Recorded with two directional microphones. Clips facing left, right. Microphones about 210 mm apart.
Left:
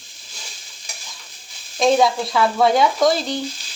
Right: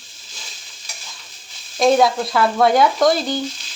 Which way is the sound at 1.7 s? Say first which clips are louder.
Right 1 dB; centre (ahead or behind).